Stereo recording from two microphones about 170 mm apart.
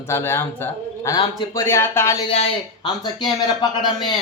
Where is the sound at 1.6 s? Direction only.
15° left (ahead or behind).